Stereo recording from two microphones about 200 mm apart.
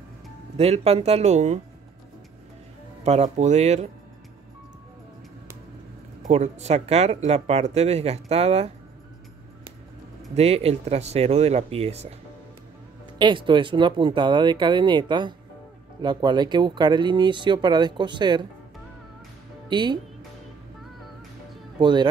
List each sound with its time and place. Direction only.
0.6 s speech: 30° right (ahead or behind)
3.0 s speech: 35° right (ahead or behind)
6.2 s speech: 35° right (ahead or behind)
10.3 s speech: 30° right (ahead or behind)
13.2 s speech: 25° right (ahead or behind)
19.7 s speech: 20° right (ahead or behind)
21.7 s speech: 20° right (ahead or behind)